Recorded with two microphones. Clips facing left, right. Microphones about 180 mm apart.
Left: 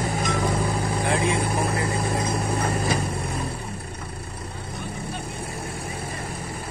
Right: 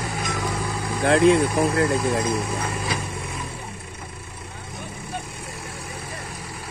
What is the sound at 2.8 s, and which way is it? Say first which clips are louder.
Vehicle: left 3 dB; 45° left (ahead or behind).